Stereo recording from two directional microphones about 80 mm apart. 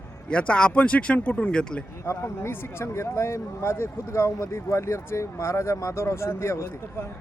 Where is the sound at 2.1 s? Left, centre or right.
Left.